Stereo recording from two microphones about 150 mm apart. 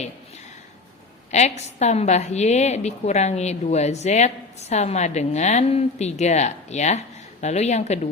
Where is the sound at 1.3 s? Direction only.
50° left (ahead or behind).